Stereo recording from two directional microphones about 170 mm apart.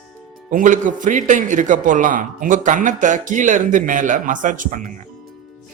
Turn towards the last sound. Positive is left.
turn(degrees=-50)  # may be behind; listen again after turning